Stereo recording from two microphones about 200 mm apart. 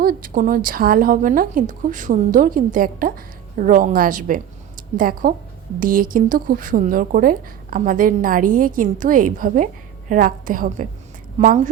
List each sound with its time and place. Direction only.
0.0 s a woman's voice: 45° right (ahead or behind)